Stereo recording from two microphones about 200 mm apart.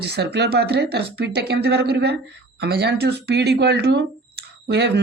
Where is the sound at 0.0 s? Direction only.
55° right (ahead or behind).